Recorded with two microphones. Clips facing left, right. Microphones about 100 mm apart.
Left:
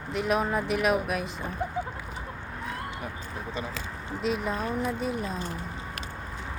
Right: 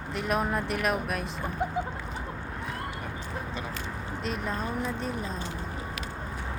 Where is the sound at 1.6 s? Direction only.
15° right (ahead or behind).